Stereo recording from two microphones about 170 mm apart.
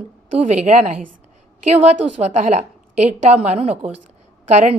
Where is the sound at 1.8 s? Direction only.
40° right (ahead or behind).